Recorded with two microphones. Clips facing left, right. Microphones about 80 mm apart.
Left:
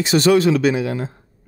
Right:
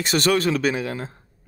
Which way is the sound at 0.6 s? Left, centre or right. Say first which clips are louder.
Left 5 dB; right.